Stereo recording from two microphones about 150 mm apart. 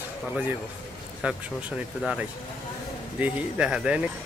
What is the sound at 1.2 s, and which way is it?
Speech, 5° right (ahead or behind).